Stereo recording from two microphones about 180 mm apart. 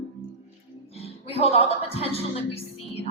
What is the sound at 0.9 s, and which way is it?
Music, 35° left (ahead or behind).